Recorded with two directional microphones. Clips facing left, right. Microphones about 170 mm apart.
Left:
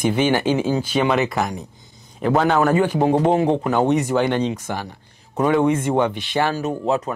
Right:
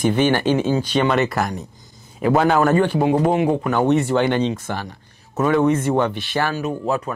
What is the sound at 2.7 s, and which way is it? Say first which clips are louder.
Speech: right 1 dB; 10° left (ahead or behind).